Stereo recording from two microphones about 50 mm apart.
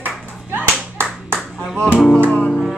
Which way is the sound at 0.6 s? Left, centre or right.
Right.